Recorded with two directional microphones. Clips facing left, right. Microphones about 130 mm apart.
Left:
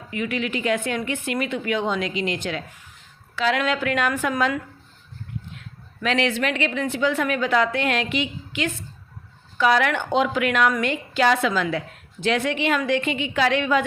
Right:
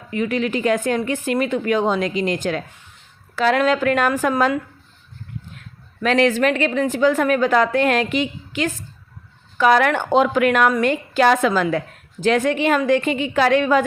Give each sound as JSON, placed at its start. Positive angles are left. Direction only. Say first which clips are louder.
{"t": 0.1, "sound": "a woman's voice", "louder": "right 5 dB", "side_deg": -40}